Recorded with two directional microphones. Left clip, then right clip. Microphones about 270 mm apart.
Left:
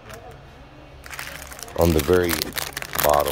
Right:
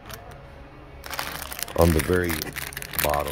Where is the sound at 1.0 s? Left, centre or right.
Centre.